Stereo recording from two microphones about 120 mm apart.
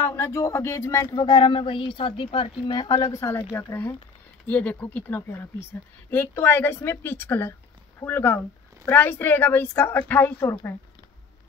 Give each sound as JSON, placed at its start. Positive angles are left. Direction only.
{"t": 0.0, "sound": "speech", "side_deg": 20}